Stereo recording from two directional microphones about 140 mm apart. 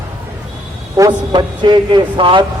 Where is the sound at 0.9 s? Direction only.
30° right (ahead or behind).